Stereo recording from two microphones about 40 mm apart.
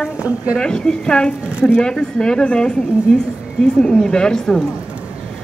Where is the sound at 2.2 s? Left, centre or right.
Left.